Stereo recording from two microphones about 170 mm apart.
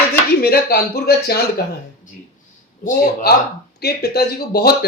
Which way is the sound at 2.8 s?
65° left (ahead or behind).